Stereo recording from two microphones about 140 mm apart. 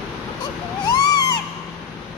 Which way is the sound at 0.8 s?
30° left (ahead or behind).